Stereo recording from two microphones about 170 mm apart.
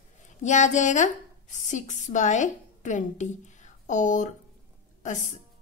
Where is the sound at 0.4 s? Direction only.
45° left (ahead or behind).